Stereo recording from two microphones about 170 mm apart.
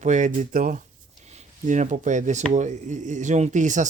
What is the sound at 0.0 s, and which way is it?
Speech, 45° right (ahead or behind).